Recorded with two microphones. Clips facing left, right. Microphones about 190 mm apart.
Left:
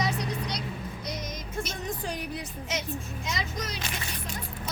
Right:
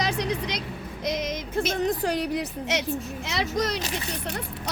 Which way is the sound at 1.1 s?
90° right.